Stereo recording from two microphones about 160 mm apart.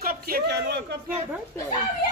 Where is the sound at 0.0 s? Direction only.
80° right.